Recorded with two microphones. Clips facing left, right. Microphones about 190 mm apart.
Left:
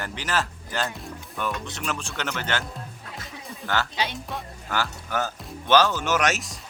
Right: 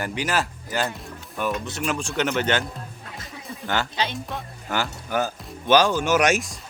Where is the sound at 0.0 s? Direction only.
10° right (ahead or behind).